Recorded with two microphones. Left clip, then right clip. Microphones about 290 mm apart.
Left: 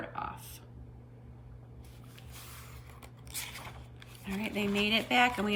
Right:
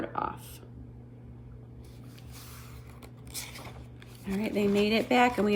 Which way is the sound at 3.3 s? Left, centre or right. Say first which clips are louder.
Even; centre.